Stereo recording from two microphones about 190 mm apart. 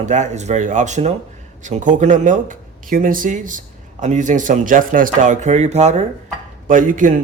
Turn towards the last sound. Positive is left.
turn(degrees=-45)  # may be behind; listen again after turning